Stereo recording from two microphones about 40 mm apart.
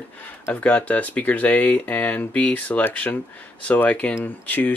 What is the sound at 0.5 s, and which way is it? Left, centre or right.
Speech, left.